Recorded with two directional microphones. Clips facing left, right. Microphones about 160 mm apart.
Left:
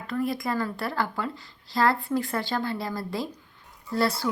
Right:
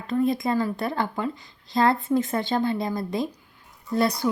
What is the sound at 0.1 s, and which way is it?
A woman's voice, 20° right (ahead or behind).